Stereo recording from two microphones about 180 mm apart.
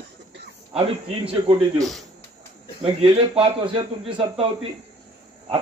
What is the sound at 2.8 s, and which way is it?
A man's voice, 30° right (ahead or behind).